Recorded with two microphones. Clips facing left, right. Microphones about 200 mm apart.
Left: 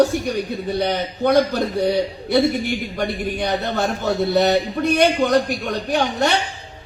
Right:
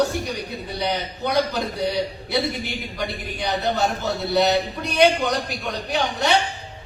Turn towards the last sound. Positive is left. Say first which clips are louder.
# left 2 dB
turn(degrees=50)  # may be behind; listen again after turning